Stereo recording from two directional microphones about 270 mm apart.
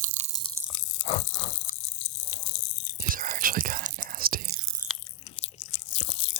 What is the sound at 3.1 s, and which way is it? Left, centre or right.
Whispering, right.